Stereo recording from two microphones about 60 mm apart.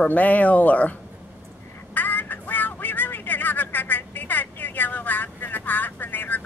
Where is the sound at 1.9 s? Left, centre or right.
Left.